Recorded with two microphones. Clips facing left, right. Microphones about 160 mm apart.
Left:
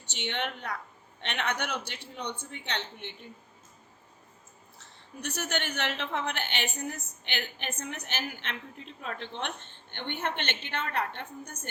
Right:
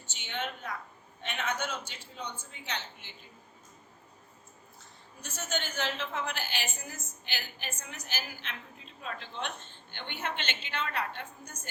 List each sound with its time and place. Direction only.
0.0 s a woman's voice: 70° left (ahead or behind)
4.8 s a woman's voice: 70° left (ahead or behind)